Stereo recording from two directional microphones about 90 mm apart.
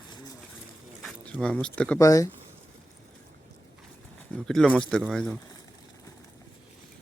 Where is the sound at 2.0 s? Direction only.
40° left (ahead or behind).